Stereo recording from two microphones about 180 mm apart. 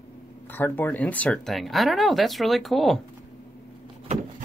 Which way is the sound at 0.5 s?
10° left (ahead or behind).